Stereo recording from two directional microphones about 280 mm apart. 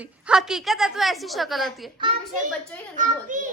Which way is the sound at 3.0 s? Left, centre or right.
Right.